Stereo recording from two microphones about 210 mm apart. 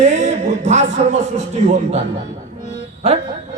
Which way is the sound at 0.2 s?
35° right (ahead or behind).